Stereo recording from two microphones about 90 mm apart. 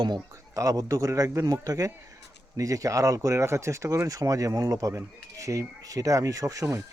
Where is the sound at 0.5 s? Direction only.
40° right (ahead or behind).